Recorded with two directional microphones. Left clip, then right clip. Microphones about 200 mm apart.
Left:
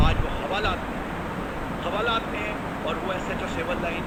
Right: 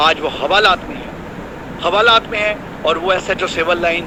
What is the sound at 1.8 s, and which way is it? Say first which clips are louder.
Speech: right 15 dB; 40° right (ahead or behind).